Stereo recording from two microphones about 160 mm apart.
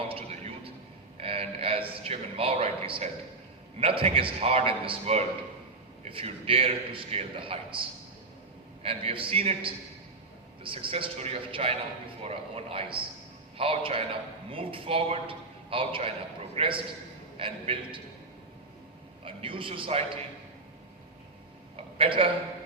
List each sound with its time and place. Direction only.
0.1 s a sound: 40° right (ahead or behind)
3.8 s a man's voice: 35° right (ahead or behind)
19.2 s a man's voice: 35° right (ahead or behind)
21.9 s a man's voice: 35° right (ahead or behind)